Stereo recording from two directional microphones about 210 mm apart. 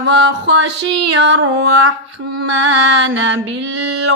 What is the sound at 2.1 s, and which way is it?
Mantra, 75° right (ahead or behind).